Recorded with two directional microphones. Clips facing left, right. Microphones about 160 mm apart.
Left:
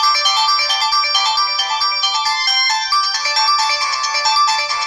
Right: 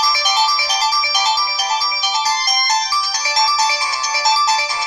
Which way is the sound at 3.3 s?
20° right (ahead or behind).